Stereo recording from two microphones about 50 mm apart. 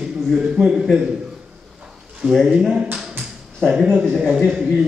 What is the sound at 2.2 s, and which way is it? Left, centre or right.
Speech, right.